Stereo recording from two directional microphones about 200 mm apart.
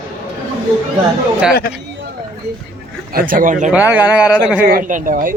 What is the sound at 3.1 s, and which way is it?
Speech, 45° right (ahead or behind).